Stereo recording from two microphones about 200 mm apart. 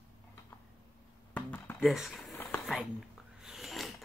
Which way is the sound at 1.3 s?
10° left (ahead or behind).